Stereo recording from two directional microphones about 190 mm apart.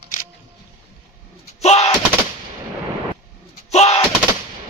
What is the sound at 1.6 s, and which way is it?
Machine gun, 35° left (ahead or behind).